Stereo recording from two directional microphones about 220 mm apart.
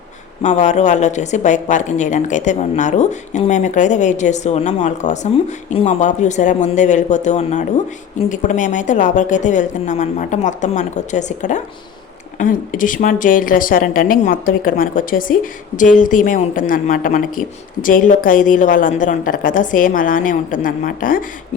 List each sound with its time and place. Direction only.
0.4 s speech: 30° left (ahead or behind)